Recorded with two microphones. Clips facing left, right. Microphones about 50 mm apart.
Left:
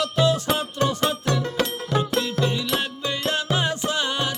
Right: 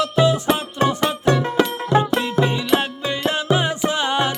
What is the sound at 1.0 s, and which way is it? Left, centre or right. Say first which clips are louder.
Music: right 5 dB; right.